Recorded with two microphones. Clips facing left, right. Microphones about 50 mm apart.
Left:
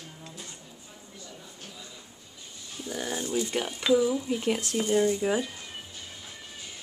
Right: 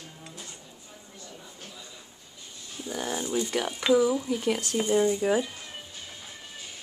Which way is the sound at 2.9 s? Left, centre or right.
Right.